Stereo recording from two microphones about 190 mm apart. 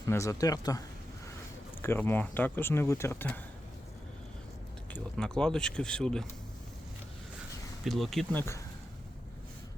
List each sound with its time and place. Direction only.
0.0 s speech: 15° left (ahead or behind)
1.8 s speech: 10° left (ahead or behind)
4.9 s speech: 5° left (ahead or behind)
7.9 s speech: centre (ahead or behind)